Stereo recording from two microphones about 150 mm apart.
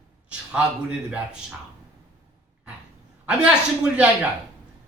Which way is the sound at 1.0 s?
5° right (ahead or behind).